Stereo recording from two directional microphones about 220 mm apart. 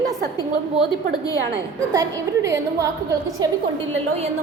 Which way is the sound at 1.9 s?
15° right (ahead or behind).